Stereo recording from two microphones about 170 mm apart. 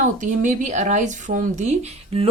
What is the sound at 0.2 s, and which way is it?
Speech, 45° right (ahead or behind).